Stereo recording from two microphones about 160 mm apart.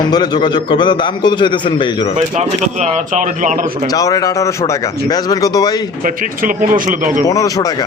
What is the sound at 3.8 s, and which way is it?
A man's voice, 20° left (ahead or behind).